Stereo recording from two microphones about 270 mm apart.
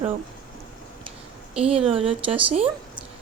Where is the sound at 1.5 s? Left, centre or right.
Right.